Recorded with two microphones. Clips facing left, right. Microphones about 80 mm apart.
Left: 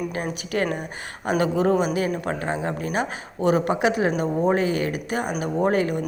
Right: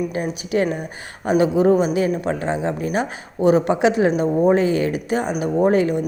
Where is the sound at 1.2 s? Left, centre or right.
Centre.